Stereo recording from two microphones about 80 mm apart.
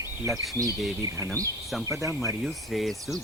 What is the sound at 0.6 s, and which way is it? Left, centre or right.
Speech, left.